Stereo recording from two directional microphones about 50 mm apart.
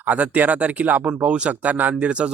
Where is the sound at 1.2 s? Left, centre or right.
Right.